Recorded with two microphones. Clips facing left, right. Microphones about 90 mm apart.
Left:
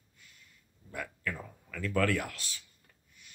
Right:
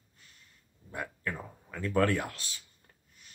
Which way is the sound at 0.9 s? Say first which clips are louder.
Right 1 dB; 30° right (ahead or behind).